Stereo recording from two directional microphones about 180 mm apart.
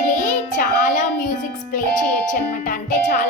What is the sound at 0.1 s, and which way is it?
Music, 45° left (ahead or behind).